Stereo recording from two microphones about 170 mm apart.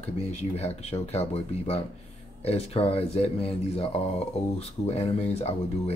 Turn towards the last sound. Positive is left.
turn(degrees=35)  # may be behind; listen again after turning